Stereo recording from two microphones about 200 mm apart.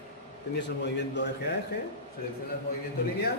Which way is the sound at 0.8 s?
60° left (ahead or behind).